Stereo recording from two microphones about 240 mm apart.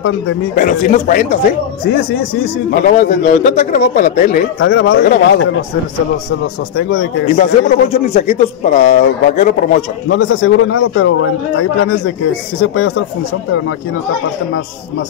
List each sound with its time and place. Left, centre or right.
0.6 s a man's voice: left
7.3 s a man's voice: left
10.0 s a man's voice: left